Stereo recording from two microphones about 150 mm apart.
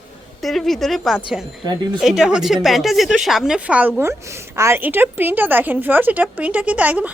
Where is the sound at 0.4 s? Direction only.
Centre (ahead or behind).